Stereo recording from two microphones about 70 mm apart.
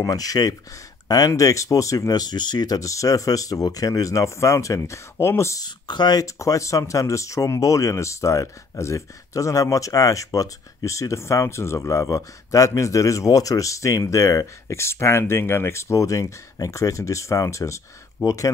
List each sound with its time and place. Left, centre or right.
0.0 s speech: left
5.6 s speech: left
6.2 s speech: left